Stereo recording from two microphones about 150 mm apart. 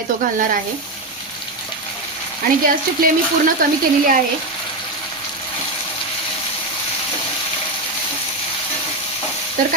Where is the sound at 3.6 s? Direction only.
65° right (ahead or behind).